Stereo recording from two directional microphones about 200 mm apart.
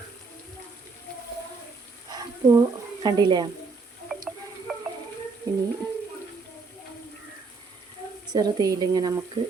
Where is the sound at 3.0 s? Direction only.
20° right (ahead or behind).